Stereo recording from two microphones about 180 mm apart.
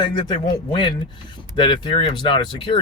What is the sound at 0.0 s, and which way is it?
Speech, 25° left (ahead or behind).